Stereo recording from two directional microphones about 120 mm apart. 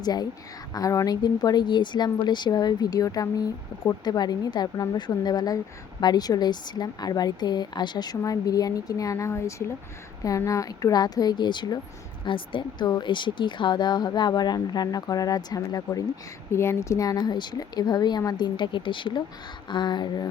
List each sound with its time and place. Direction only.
0.0 s speech: 35° left (ahead or behind)